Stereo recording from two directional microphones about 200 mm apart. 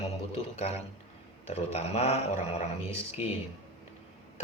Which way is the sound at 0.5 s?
30° left (ahead or behind).